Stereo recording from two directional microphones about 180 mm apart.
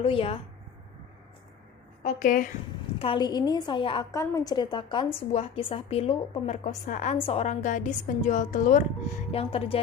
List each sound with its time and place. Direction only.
0.0 s a woman's voice: 30° left (ahead or behind)
2.0 s a woman's voice: 45° left (ahead or behind)
3.0 s a woman's voice: 25° left (ahead or behind); by 8.8 s 45° left (ahead or behind)
9.3 s a woman's voice: 30° left (ahead or behind)